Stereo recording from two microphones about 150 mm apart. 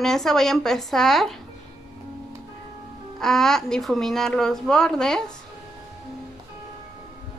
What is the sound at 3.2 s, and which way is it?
Speech, 5° left (ahead or behind).